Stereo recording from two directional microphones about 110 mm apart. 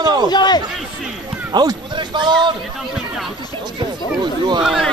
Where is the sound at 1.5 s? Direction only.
40° right (ahead or behind).